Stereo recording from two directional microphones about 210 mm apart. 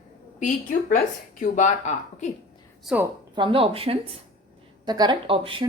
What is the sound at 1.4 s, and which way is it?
Speech, 35° left (ahead or behind).